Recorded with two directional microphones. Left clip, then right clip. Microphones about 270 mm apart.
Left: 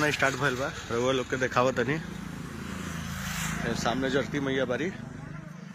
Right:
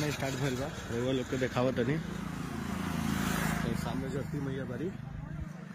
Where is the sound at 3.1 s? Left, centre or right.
Right.